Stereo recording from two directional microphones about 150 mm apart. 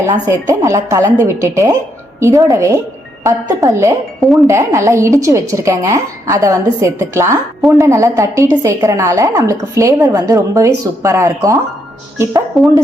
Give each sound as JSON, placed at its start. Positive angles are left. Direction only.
{"t": 0.3, "sound": "a woman's voice", "side_deg": -20}